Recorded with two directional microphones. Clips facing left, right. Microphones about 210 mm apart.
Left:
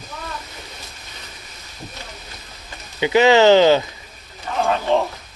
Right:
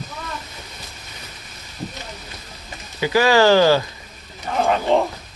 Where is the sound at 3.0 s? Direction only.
20° left (ahead or behind).